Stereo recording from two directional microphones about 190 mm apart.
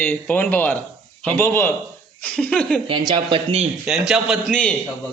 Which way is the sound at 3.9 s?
5° right (ahead or behind).